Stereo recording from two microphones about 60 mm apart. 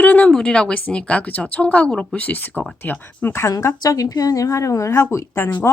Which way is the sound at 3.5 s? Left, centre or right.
Left.